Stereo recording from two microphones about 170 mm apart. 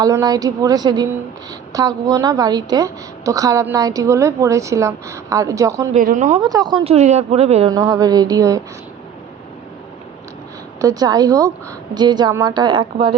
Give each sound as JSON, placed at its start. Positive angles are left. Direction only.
{"t": 0.0, "sound": "a woman's voice", "side_deg": -20}
{"t": 5.9, "sound": "speech", "side_deg": -50}
{"t": 6.4, "sound": "a woman's voice", "side_deg": -25}
{"t": 6.9, "sound": "speech", "side_deg": -40}
{"t": 7.7, "sound": "a woman's voice", "side_deg": -20}
{"t": 10.8, "sound": "a woman's voice", "side_deg": -20}